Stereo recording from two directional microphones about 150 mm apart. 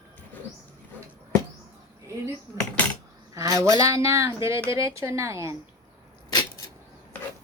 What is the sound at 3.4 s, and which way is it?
Speech, 20° right (ahead or behind).